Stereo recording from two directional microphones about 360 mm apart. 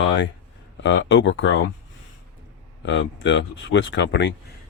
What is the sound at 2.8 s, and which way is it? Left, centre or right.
Speech, left.